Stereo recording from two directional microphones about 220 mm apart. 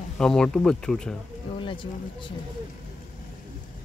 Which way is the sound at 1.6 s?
20° left (ahead or behind).